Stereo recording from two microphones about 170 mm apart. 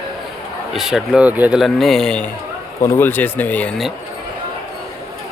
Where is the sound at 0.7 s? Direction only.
Centre (ahead or behind).